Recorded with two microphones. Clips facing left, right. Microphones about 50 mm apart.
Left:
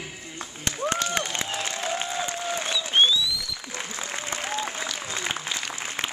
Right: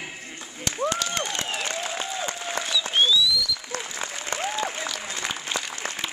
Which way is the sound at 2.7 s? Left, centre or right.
Left.